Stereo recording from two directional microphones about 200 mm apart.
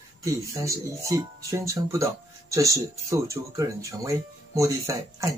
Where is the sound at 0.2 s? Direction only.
15° right (ahead or behind).